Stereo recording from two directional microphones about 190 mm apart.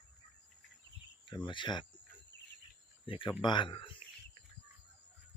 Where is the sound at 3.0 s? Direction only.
25° left (ahead or behind).